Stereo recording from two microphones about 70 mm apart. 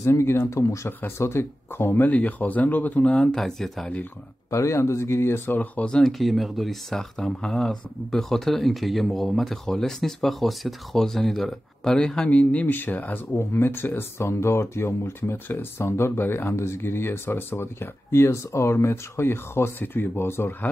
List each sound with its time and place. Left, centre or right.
0.0 s speech: left
3.2 s speech: centre
4.5 s speech: left
5.6 s speech: centre
6.1 s speech: centre
12.3 s speech: centre
13.3 s speech: left